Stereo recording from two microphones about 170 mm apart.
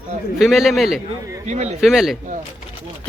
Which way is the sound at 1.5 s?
40° right (ahead or behind).